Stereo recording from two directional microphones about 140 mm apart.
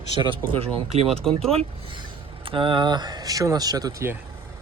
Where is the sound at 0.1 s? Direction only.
35° right (ahead or behind).